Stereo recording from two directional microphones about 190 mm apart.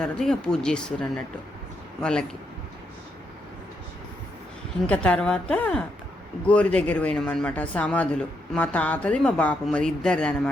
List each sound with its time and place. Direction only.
0.0 s speech: 5° left (ahead or behind)
4.9 s speech: 5° left (ahead or behind)